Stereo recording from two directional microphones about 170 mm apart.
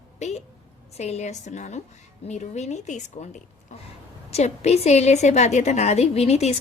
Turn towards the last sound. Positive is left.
turn(degrees=40)  # may be behind; listen again after turning